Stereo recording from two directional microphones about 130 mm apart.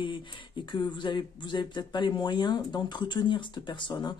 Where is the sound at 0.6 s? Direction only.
35° left (ahead or behind).